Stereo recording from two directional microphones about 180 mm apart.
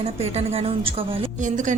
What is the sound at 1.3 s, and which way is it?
Speech, 45° right (ahead or behind).